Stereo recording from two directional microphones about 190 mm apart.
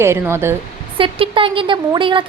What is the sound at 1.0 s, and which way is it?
Speech, 25° right (ahead or behind).